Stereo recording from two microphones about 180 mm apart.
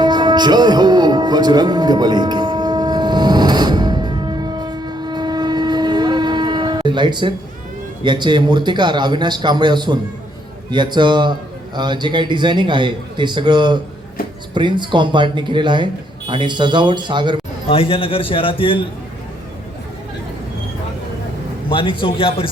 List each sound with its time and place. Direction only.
0.0 s music: 25° right (ahead or behind)
8.0 s a man's voice: 25° right (ahead or behind)
17.7 s a man's voice: 30° left (ahead or behind)
21.7 s a man's voice: 30° left (ahead or behind)